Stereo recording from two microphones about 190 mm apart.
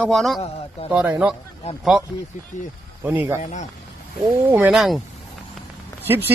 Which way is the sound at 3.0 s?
10° right (ahead or behind).